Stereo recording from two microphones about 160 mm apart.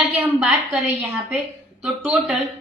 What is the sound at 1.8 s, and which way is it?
Speech, 5° right (ahead or behind).